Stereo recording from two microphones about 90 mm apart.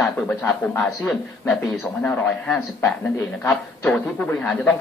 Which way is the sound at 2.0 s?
20° left (ahead or behind).